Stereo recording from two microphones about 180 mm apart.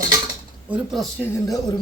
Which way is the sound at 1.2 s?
15° left (ahead or behind).